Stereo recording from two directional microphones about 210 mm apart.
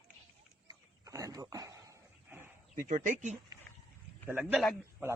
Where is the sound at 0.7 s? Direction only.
15° right (ahead or behind).